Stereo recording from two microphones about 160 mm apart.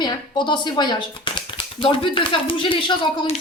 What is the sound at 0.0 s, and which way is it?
Speech, 30° left (ahead or behind).